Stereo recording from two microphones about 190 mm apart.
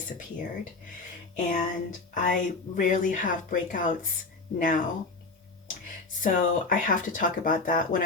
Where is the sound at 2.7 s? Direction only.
45° left (ahead or behind).